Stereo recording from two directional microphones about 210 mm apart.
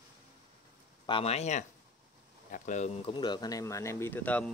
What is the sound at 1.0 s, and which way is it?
Speech, 25° left (ahead or behind).